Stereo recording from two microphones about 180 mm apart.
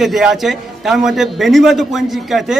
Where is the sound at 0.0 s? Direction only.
Centre (ahead or behind).